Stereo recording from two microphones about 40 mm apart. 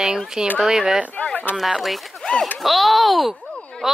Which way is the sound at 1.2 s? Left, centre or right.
Left.